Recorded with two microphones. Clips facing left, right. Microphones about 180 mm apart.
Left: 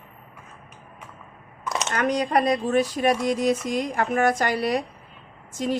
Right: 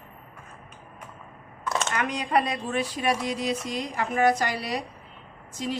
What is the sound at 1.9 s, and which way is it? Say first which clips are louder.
Speech: left 5 dB; 40° left (ahead or behind).